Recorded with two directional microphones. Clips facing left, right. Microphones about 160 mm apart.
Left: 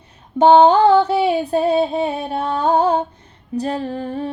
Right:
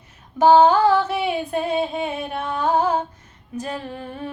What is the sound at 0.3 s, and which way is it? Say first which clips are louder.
Music: left 3 dB; 25° left (ahead or behind).